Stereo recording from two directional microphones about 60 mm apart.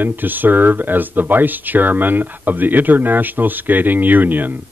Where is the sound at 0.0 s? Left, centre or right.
Right.